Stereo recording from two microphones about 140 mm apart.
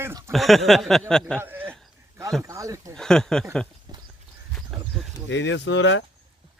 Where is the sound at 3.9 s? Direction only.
30° right (ahead or behind).